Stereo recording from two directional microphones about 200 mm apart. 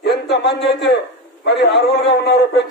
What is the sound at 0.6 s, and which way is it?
Speech, centre (ahead or behind).